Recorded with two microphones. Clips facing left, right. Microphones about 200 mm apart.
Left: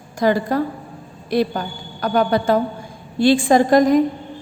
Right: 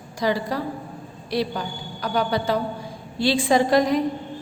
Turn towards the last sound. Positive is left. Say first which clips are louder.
# left 5 dB
turn(degrees=50)  # may be behind; listen again after turning